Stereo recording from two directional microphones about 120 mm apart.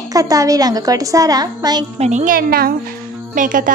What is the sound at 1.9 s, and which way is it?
Speech, 75° right (ahead or behind).